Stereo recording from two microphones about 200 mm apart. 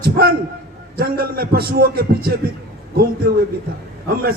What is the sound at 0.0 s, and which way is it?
A man's voice, 50° right (ahead or behind).